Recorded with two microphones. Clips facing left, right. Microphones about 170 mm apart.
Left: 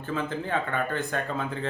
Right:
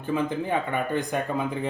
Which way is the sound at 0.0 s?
15° right (ahead or behind).